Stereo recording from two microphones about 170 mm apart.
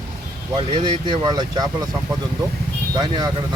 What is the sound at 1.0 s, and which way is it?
Speech, 25° right (ahead or behind).